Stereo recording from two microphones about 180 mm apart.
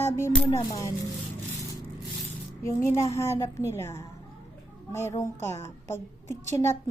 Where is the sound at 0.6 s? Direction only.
20° left (ahead or behind).